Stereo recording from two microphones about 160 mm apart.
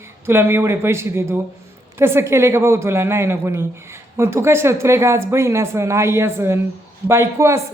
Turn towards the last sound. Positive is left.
turn(degrees=-20)  # may be behind; listen again after turning